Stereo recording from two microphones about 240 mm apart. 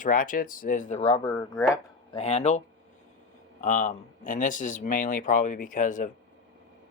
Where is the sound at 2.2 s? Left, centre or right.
Left.